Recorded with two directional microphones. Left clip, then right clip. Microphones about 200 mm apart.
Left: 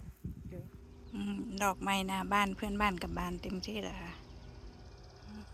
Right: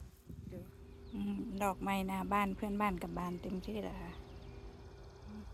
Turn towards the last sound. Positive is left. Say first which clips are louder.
# left 2 dB
turn(degrees=-5)  # may be behind; listen again after turning